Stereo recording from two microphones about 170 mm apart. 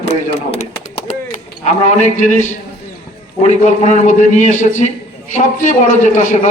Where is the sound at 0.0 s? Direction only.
40° left (ahead or behind).